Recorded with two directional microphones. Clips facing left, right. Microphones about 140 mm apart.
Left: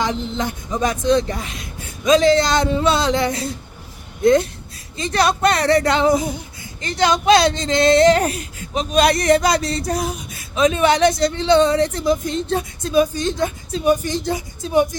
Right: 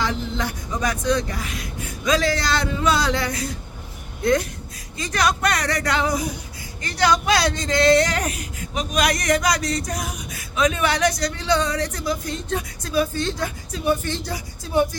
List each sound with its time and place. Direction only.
0.0 s speech: 20° left (ahead or behind)
13.9 s speech: 15° left (ahead or behind)